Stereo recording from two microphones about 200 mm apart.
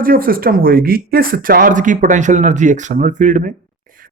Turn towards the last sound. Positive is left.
turn(degrees=-40)  # may be behind; listen again after turning